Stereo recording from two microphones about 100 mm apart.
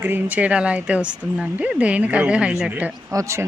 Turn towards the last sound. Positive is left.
turn(degrees=-30)  # may be behind; listen again after turning